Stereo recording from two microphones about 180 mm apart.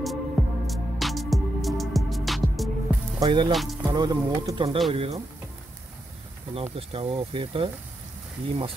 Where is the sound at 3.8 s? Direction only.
20° right (ahead or behind).